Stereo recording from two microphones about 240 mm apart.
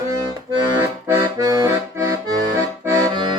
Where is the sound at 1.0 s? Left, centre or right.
Centre.